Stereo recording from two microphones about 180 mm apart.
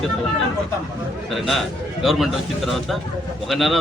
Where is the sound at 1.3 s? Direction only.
Centre (ahead or behind).